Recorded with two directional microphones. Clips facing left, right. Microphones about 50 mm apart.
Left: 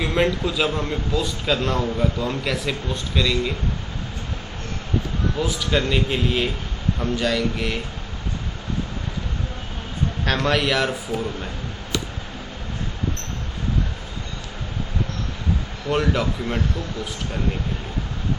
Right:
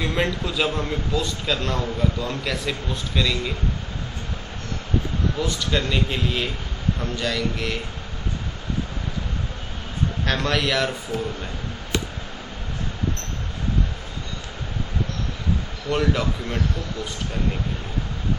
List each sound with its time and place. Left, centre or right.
0.0 s a man's voice: centre
5.4 s a man's voice: centre
10.2 s a man's voice: centre
15.9 s a man's voice: centre